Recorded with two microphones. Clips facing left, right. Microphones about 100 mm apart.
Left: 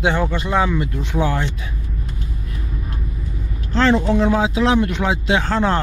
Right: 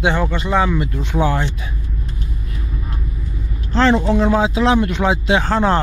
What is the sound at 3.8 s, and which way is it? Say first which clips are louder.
Speech: right 1 dB; 5° right (ahead or behind).